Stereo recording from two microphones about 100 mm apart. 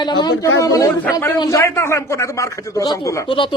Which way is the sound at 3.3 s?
60° left (ahead or behind).